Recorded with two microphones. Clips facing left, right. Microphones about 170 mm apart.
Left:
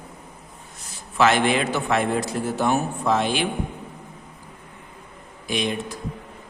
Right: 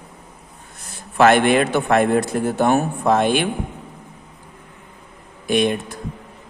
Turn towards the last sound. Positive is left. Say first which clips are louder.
# right 7 dB
turn(degrees=-55)  # may be behind; listen again after turning